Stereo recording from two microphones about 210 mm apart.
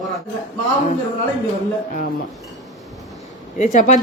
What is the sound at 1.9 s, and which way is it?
Speech, 45° left (ahead or behind).